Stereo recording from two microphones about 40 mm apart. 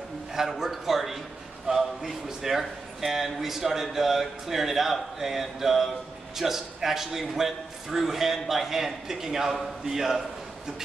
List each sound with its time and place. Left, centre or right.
0.3 s speech: centre